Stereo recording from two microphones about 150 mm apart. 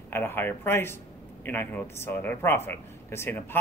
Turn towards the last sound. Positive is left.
turn(degrees=15)  # may be behind; listen again after turning